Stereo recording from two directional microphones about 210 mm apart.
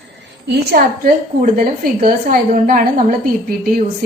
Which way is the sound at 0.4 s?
50° right (ahead or behind).